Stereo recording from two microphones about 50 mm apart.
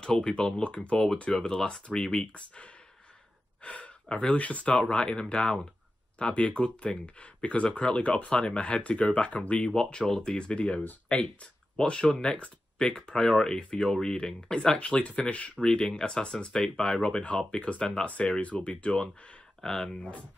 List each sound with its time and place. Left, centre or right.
0.0 s speech: centre
9.8 s speech: centre
11.1 s speech: centre
15.6 s speech: centre